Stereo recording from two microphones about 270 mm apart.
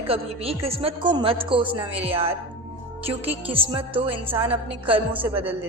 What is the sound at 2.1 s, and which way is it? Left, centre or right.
A woman's voice, right.